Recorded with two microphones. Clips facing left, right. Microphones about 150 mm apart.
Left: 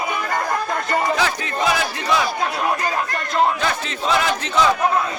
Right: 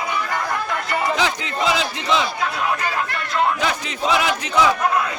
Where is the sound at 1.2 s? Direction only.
20° right (ahead or behind).